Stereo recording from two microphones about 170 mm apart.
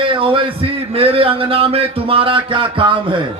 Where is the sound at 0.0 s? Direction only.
30° right (ahead or behind).